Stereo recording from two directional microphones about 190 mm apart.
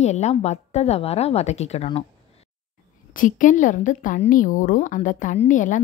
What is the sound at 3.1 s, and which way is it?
A woman's voice, 45° left (ahead or behind).